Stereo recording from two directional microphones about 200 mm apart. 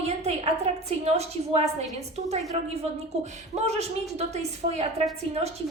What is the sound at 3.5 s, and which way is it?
A woman's voice, 35° right (ahead or behind).